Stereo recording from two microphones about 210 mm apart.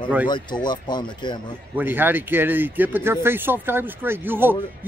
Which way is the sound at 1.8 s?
10° right (ahead or behind).